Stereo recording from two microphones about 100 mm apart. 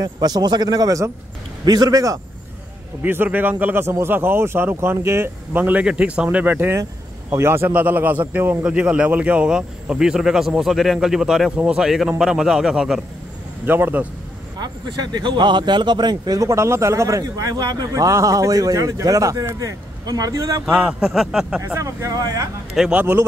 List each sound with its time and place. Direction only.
0.0 s speech: 40° right (ahead or behind)
3.0 s a man's voice: 20° right (ahead or behind)
13.7 s speech: 20° right (ahead or behind)
14.6 s speech: 45° right (ahead or behind)
20.6 s a man's voice: 5° right (ahead or behind)
21.5 s speech: 25° right (ahead or behind)
22.8 s speech: 15° right (ahead or behind)